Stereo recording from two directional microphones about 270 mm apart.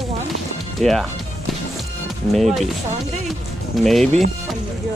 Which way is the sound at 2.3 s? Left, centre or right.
Centre.